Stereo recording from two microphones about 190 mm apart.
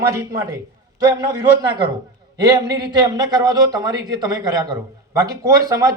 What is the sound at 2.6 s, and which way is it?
A man's voice, 20° right (ahead or behind).